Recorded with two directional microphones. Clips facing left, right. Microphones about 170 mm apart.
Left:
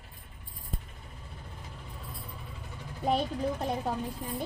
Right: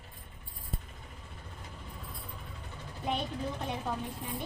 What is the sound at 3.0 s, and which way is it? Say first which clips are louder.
Speech: left 6 dB; 35° left (ahead or behind).